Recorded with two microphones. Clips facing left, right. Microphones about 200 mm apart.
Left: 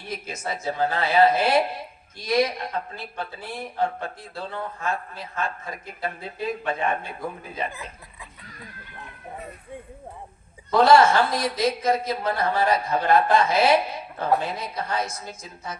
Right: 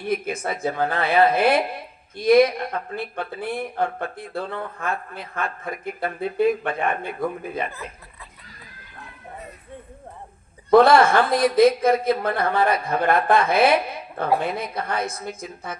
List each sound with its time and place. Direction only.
0.1 s speech: 55° right (ahead or behind)
10.7 s speech: 55° right (ahead or behind)